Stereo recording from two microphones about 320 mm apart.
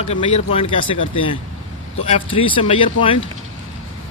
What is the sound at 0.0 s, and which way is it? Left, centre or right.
Speech, centre.